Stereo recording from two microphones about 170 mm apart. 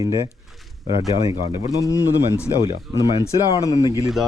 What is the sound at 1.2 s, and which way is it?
Speech, 20° right (ahead or behind).